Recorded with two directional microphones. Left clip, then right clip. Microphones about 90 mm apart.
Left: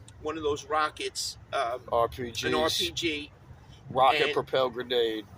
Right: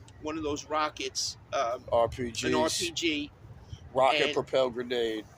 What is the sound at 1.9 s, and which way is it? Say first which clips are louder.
Speech: right 1 dB; 25° right (ahead or behind).